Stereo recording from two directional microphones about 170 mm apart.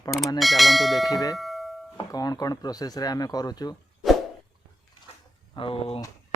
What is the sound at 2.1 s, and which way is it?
Speech, 20° left (ahead or behind).